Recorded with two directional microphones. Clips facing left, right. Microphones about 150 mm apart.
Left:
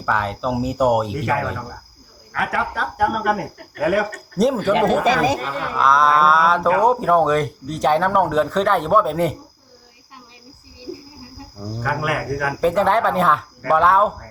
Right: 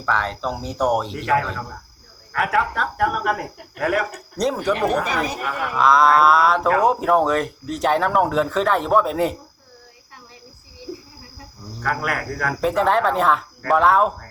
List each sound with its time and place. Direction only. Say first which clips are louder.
0.0 s speech: left 1 dB; 5° left (ahead or behind)
5.0 s speech: left 7 dB; 90° left
5.4 s speech: even; 10° right (ahead or behind)
5.7 s speech: right 1 dB; centre (ahead or behind)
11.8 s speech: left 2 dB; 5° left (ahead or behind)